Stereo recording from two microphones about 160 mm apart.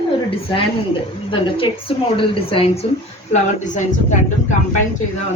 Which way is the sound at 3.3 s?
50° left (ahead or behind).